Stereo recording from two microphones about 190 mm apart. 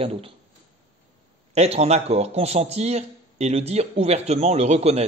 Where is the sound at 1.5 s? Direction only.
35° right (ahead or behind).